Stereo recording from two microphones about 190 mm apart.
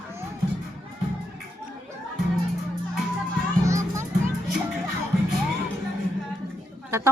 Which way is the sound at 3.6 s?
15° right (ahead or behind).